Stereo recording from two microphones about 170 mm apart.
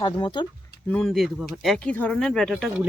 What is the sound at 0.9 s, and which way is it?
Speech, 5° left (ahead or behind).